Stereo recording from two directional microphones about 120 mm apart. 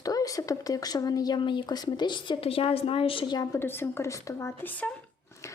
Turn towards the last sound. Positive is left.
turn(degrees=15)  # may be behind; listen again after turning